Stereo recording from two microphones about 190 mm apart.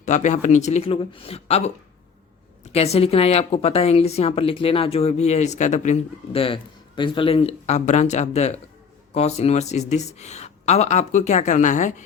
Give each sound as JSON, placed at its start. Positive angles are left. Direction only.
{"t": 0.0, "sound": "a woman's voice", "side_deg": 40}
{"t": 2.7, "sound": "a woman's voice", "side_deg": 35}